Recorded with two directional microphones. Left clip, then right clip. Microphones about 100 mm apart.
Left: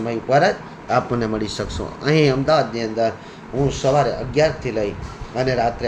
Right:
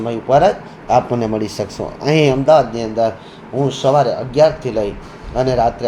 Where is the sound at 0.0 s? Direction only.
50° right (ahead or behind).